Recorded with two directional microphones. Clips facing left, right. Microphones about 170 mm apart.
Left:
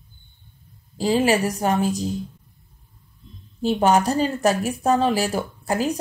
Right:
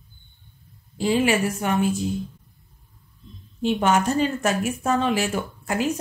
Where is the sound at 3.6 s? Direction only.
35° left (ahead or behind).